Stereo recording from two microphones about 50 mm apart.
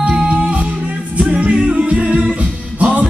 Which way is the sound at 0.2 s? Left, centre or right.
Right.